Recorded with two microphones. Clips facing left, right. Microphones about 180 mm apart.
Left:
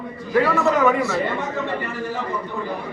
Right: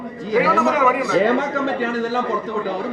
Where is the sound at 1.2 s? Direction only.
90° right.